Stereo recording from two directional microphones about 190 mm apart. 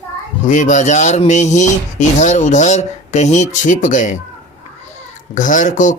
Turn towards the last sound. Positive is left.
turn(degrees=40)  # may be behind; listen again after turning